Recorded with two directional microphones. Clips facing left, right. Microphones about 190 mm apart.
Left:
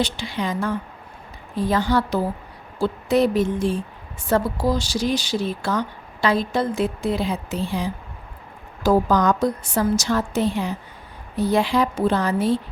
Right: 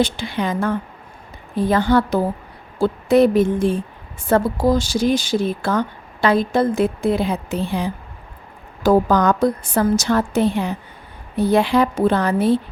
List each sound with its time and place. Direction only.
0.0 s a woman's voice: 55° right (ahead or behind)